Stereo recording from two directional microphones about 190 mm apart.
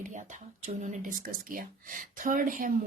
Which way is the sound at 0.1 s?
40° right (ahead or behind).